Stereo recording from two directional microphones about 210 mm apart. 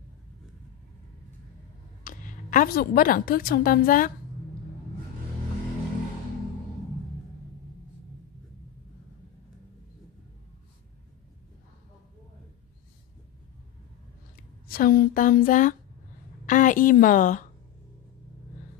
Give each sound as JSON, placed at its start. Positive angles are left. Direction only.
{"t": 2.0, "sound": "a woman's voice", "side_deg": 40}
{"t": 14.7, "sound": "a sound", "side_deg": 45}
{"t": 16.4, "sound": "a woman's voice", "side_deg": 35}